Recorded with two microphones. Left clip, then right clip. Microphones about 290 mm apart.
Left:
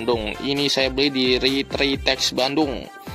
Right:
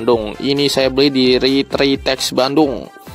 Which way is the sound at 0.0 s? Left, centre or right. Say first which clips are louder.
Right 7 dB; right.